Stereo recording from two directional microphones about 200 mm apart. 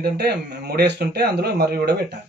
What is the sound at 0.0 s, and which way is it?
A man's voice, 50° right (ahead or behind).